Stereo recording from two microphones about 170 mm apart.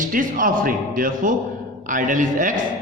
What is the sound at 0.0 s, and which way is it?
A man's voice, 50° right (ahead or behind).